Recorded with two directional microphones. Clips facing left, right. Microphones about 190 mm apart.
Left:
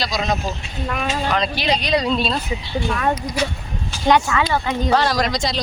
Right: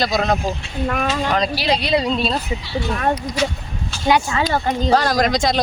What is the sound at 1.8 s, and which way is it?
Speech, 25° right (ahead or behind).